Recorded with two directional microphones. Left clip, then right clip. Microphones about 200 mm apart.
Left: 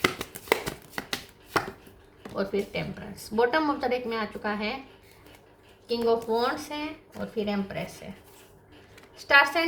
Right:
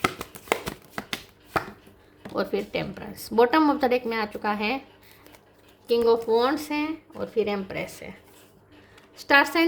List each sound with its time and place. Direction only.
0.0 s hands: 5° left (ahead or behind)
2.3 s a woman's voice: 55° right (ahead or behind)
5.9 s speech: 55° right (ahead or behind)
9.1 s a woman's voice: 55° right (ahead or behind)